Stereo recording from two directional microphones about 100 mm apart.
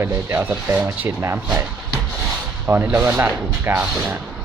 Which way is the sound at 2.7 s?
20° right (ahead or behind).